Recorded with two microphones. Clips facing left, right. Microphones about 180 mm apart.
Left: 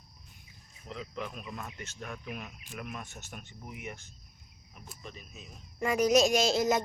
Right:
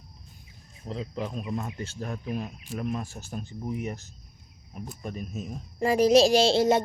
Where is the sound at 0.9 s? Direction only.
30° right (ahead or behind).